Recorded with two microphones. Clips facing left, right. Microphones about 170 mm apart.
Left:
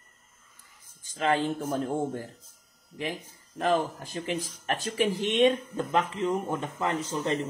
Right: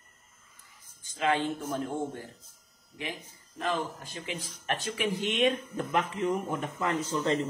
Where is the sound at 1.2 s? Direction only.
40° left (ahead or behind).